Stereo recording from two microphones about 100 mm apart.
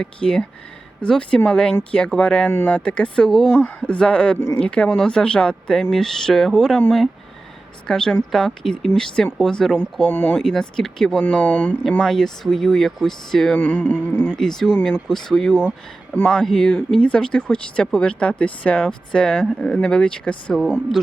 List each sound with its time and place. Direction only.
0.0 s speech: 5° left (ahead or behind)
4.4 s a sound: 25° left (ahead or behind)
4.6 s speech: 10° left (ahead or behind)
7.9 s speech: 5° left (ahead or behind)
9.7 s speech: 10° right (ahead or behind)
10.1 s a sound: 20° left (ahead or behind)
10.3 s speech: 5° left (ahead or behind)
12.0 s speech: 5° left (ahead or behind)
13.6 s a sound: 20° left (ahead or behind)
14.3 s speech: 5° left (ahead or behind)
16.1 s speech: 15° left (ahead or behind)